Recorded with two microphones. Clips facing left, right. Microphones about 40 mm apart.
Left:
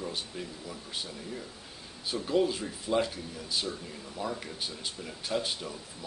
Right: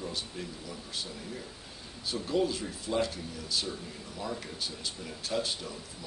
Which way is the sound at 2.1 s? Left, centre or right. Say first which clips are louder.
Left 2 dB; centre.